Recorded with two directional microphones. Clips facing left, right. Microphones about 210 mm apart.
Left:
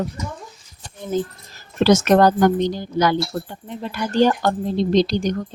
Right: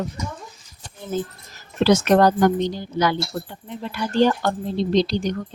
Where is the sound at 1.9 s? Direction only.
45° left (ahead or behind).